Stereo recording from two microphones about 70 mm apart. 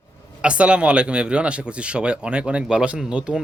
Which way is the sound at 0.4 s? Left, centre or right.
Centre.